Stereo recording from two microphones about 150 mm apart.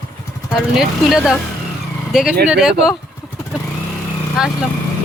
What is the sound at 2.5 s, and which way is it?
Speech, 5° right (ahead or behind).